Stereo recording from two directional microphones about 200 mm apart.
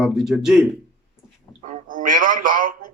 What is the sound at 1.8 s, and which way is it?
Radio, 40° right (ahead or behind).